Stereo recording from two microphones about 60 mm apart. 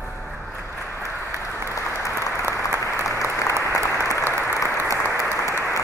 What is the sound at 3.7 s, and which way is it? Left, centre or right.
Applause, left.